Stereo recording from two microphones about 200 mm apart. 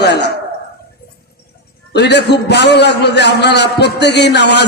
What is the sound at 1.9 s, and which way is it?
A man's voice, 55° left (ahead or behind).